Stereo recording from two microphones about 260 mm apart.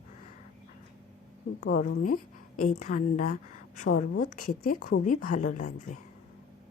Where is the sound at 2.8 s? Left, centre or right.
Left.